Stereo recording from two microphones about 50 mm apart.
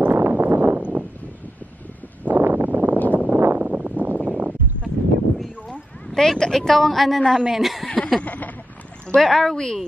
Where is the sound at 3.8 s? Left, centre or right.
Right.